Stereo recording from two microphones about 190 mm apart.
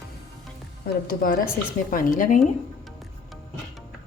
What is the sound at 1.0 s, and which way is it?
Speech, 50° left (ahead or behind).